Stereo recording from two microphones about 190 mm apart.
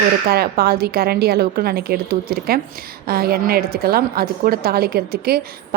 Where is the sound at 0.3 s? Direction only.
55° right (ahead or behind).